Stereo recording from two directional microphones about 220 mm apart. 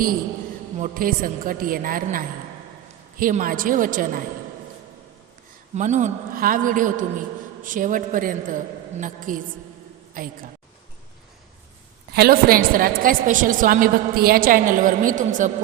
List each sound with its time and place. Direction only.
0.8 s a woman's voice: 40° right (ahead or behind)
5.7 s a woman's voice: 30° right (ahead or behind)
12.1 s a woman's voice: 45° right (ahead or behind)